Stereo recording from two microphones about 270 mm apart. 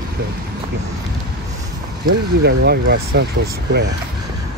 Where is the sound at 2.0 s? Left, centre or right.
Right.